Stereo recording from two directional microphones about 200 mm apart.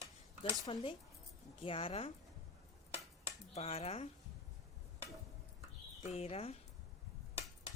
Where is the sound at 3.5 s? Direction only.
30° left (ahead or behind).